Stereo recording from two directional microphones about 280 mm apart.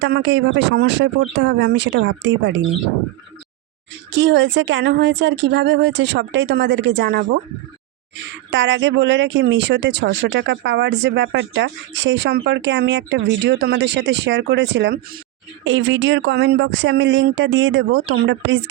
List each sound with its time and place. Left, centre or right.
0.0 s speech: right
4.1 s speech: right